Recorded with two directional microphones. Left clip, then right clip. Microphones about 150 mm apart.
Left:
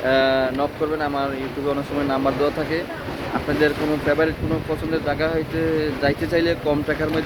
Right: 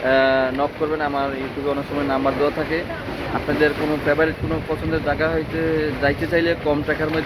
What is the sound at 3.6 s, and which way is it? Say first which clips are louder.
Speech: right 1 dB; 10° left (ahead or behind).